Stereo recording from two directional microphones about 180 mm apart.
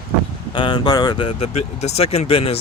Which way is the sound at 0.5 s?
25° left (ahead or behind).